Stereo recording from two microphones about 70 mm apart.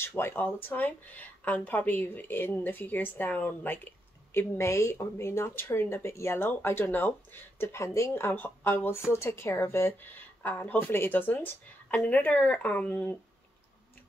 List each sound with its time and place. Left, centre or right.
0.0 s speech: left